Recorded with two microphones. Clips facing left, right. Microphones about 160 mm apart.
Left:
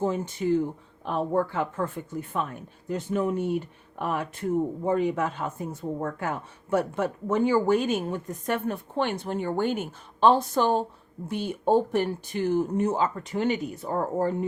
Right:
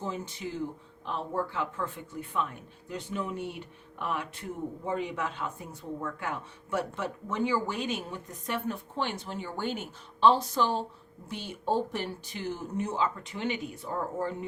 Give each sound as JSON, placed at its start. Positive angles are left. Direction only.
{"t": 0.0, "sound": "speech", "side_deg": 50}